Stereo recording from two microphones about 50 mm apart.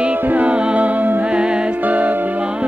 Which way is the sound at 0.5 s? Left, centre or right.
Right.